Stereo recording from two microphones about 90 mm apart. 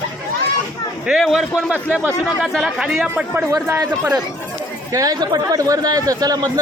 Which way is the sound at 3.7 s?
30° right (ahead or behind).